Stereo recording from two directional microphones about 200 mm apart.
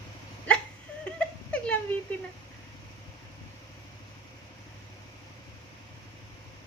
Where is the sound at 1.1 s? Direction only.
5° left (ahead or behind).